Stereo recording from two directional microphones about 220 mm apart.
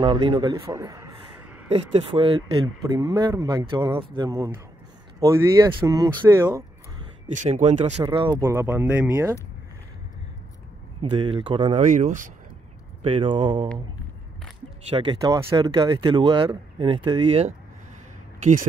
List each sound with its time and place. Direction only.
0.0 s a man's voice: 20° right (ahead or behind)
1.7 s speech: 25° right (ahead or behind)
7.3 s speech: 30° right (ahead or behind); by 9.4 s 10° right (ahead or behind)
11.0 s speech: 25° right (ahead or behind)
13.0 s speech: 25° right (ahead or behind)
14.9 s speech: 20° right (ahead or behind)
18.4 s speech: 40° right (ahead or behind)